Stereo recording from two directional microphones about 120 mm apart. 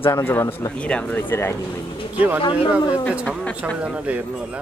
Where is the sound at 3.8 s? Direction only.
10° right (ahead or behind).